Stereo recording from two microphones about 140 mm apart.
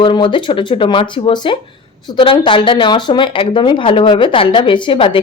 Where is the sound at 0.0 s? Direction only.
35° left (ahead or behind).